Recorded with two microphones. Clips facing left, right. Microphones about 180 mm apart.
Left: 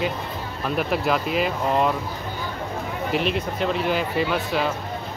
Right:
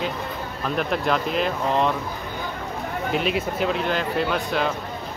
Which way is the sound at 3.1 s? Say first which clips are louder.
Even; 5° right (ahead or behind).